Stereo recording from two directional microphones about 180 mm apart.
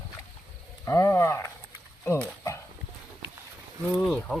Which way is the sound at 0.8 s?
15° left (ahead or behind).